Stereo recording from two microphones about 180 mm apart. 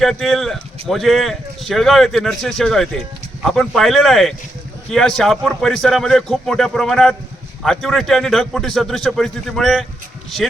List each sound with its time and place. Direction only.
0.0 s speech: centre (ahead or behind)